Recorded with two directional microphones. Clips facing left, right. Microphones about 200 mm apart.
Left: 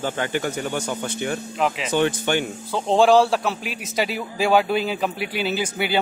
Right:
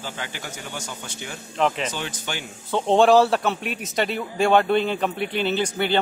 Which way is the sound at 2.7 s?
Centre (ahead or behind).